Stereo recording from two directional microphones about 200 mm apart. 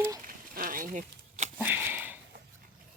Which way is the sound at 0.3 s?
45° right (ahead or behind).